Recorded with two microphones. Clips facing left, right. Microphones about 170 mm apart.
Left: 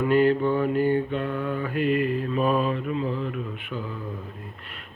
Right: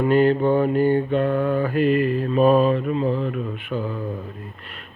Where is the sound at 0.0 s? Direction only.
30° right (ahead or behind).